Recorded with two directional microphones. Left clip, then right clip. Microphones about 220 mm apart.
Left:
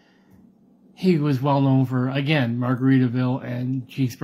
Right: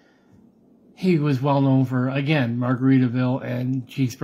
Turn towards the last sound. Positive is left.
turn(degrees=-15)  # may be behind; listen again after turning